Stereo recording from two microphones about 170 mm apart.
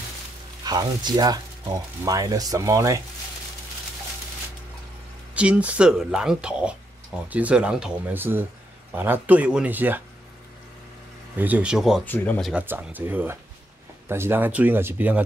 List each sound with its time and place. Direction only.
0.7 s speech: 25° right (ahead or behind)
5.3 s speech: 5° right (ahead or behind)
11.3 s speech: 10° right (ahead or behind)
12.0 s speech: 10° left (ahead or behind)
12.6 s speech: 10° right (ahead or behind)